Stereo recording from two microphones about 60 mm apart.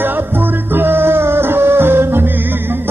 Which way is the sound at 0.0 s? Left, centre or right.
Right.